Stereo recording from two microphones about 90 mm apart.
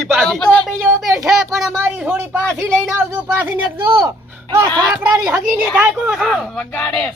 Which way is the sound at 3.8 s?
60° right (ahead or behind).